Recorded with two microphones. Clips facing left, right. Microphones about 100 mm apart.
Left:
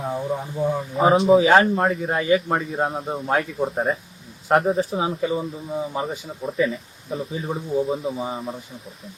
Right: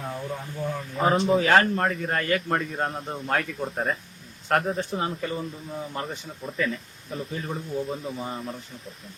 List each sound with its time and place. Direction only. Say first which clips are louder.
0.1 s speech: left 7 dB; 20° left (ahead or behind)
0.9 s a man's voice: left 6 dB; 5° left (ahead or behind)